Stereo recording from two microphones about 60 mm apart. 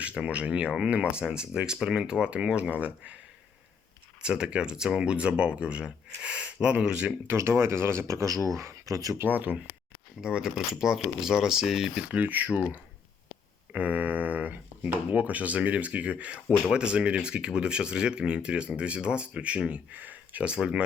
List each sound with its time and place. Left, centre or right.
0.0 s speech: centre
4.2 s speech: centre
7.3 s speech: right
9.3 s a sound: right
10.2 s speech: centre
12.0 s a sound: right
13.7 s a sound: right
15.1 s speech: right
20.5 s speech: centre